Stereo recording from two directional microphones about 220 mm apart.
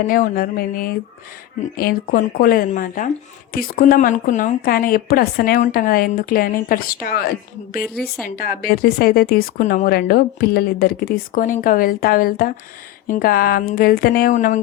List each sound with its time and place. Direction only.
0.1 s speech: 40° left (ahead or behind)